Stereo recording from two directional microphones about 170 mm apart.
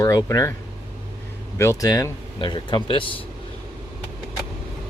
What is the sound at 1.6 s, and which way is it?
Speech, 20° left (ahead or behind).